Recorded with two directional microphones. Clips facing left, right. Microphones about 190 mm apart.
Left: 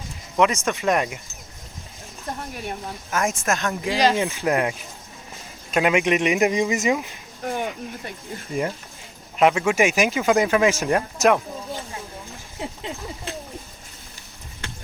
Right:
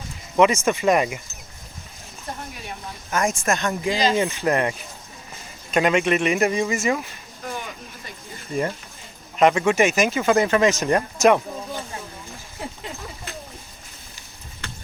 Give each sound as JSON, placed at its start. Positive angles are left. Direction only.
{"t": 0.3, "sound": "speech", "side_deg": 0}
{"t": 3.1, "sound": "speech", "side_deg": 5}
{"t": 5.7, "sound": "speech", "side_deg": 10}
{"t": 7.4, "sound": "a sound", "side_deg": 60}
{"t": 9.4, "sound": "speech", "side_deg": 5}
{"t": 12.5, "sound": "a sound", "side_deg": 20}